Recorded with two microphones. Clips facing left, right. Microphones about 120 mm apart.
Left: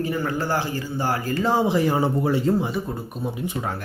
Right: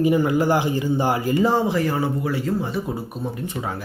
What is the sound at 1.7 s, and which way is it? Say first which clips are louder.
Speech: left 1 dB; 20° left (ahead or behind).